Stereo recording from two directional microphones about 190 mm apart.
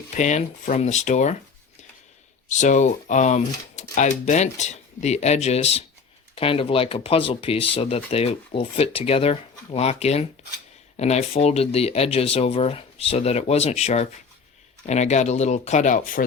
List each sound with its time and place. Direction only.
0.2 s speech: 40° left (ahead or behind)
2.5 s speech: 40° left (ahead or behind)